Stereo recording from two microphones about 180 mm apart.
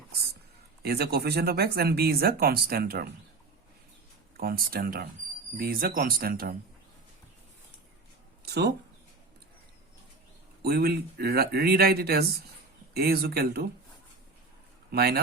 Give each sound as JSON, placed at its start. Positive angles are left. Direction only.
{"t": 0.8, "sound": "speech", "side_deg": -60}
{"t": 4.4, "sound": "speech", "side_deg": -55}
{"t": 8.4, "sound": "speech", "side_deg": -65}
{"t": 10.6, "sound": "speech", "side_deg": -60}
{"t": 14.9, "sound": "speech", "side_deg": -60}